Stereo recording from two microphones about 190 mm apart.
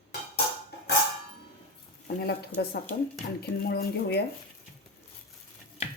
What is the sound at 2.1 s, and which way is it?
Speech, 55° left (ahead or behind).